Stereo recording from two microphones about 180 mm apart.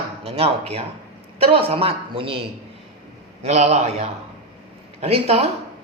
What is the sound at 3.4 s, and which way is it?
Speech, 35° right (ahead or behind).